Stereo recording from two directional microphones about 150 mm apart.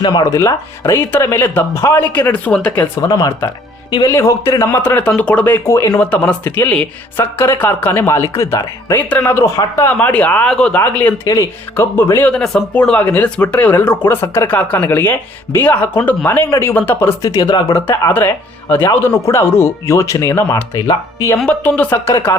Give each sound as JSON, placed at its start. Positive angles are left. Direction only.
{"t": 0.0, "sound": "speech", "side_deg": 25}
{"t": 3.0, "sound": "speech", "side_deg": 25}
{"t": 21.3, "sound": "speech", "side_deg": 10}